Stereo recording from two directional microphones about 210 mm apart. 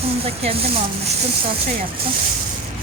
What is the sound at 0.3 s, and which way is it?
Speech, 30° right (ahead or behind).